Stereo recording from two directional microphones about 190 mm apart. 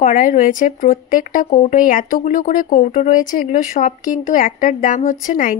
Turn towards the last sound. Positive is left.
turn(degrees=45)  # may be behind; listen again after turning